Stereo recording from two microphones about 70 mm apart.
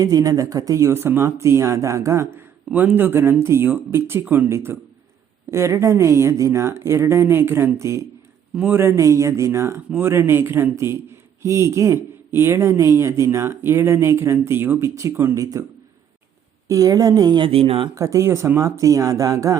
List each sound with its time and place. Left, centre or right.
0.0 s speech: right
2.7 s speech: right
4.4 s speech: right
8.5 s speech: right
8.8 s speech: right
14.8 s speech: right
16.6 s speech: right
17.9 s speech: right